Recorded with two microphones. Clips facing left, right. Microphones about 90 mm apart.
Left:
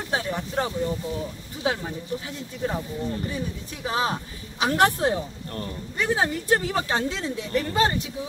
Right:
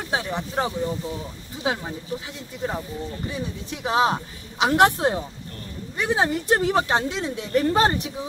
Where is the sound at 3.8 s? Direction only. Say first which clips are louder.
Right 5 dB; 25° right (ahead or behind).